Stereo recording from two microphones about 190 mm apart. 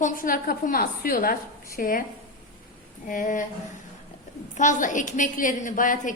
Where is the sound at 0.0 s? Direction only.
45° left (ahead or behind).